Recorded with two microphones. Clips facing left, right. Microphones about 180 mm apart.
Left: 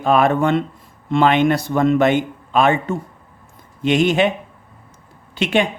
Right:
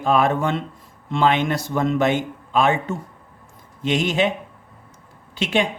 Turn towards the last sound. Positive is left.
turn(degrees=60)  # may be behind; listen again after turning